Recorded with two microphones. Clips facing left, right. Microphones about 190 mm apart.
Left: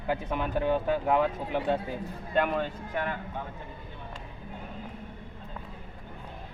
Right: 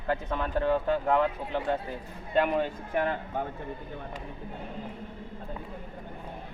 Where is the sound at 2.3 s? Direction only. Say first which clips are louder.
Right 2 dB; 5° right (ahead or behind).